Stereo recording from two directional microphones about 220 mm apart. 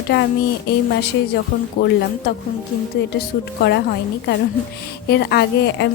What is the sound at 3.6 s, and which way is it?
A woman's voice, 45° left (ahead or behind).